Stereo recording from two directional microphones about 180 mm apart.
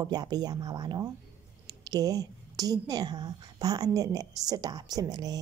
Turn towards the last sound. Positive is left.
turn(degrees=-20)  # may be behind; listen again after turning